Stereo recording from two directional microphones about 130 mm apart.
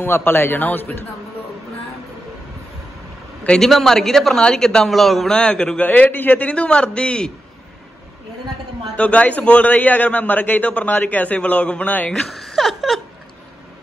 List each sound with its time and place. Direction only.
0.0 s a man's voice: 15° left (ahead or behind)
3.4 s a man's voice: 5° left (ahead or behind)
8.9 s a man's voice: 10° left (ahead or behind)